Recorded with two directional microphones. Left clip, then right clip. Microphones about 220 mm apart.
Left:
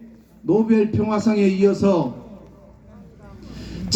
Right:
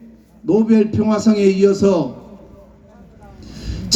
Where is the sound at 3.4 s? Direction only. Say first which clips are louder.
Right 3 dB; 50° right (ahead or behind).